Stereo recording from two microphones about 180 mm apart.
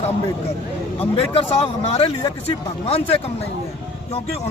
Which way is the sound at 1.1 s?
35° left (ahead or behind).